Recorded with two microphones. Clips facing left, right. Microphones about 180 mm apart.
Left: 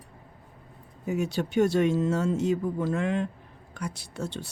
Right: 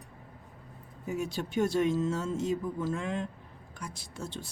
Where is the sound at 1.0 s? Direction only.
70° left (ahead or behind).